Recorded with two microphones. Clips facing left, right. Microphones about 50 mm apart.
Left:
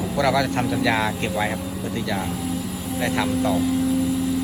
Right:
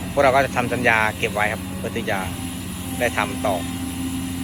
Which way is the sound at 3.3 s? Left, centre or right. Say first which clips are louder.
Left 2 dB; right.